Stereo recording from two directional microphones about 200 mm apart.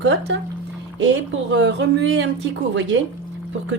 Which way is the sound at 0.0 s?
65° right (ahead or behind).